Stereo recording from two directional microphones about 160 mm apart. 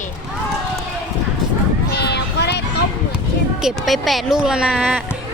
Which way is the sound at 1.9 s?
90° left.